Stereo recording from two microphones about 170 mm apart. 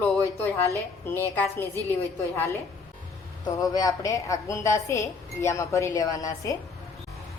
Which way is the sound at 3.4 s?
20° left (ahead or behind).